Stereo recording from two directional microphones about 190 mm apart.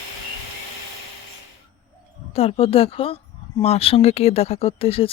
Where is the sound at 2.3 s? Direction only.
30° left (ahead or behind).